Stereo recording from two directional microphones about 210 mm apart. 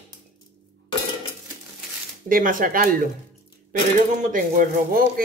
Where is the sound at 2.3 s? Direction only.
40° right (ahead or behind).